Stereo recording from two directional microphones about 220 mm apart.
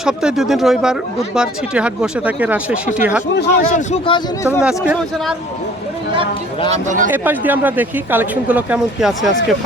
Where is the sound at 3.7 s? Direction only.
30° left (ahead or behind); by 4.6 s 15° left (ahead or behind).